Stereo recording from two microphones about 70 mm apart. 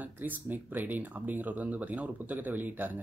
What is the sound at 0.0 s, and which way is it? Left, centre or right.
Speech, right.